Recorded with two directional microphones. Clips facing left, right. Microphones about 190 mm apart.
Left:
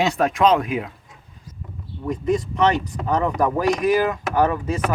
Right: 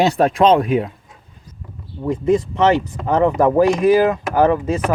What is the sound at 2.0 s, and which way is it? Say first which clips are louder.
Speech: right 5 dB; 25° right (ahead or behind).